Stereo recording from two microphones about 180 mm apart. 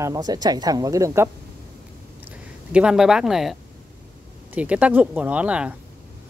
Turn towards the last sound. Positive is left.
turn(degrees=-5)  # may be behind; listen again after turning